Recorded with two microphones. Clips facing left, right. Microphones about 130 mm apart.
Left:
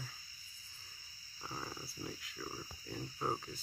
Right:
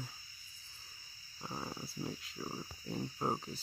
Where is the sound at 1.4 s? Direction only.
15° right (ahead or behind).